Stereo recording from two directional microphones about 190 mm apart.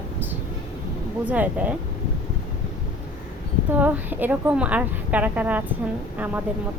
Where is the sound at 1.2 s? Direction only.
10° right (ahead or behind).